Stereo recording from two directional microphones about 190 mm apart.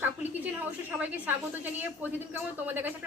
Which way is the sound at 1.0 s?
10° right (ahead or behind).